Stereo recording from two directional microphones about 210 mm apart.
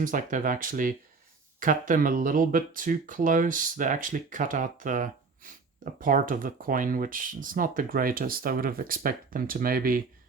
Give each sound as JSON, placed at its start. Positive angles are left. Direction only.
{"t": 0.0, "sound": "speech", "side_deg": -40}